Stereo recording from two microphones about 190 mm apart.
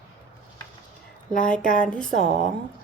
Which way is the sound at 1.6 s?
45° left (ahead or behind).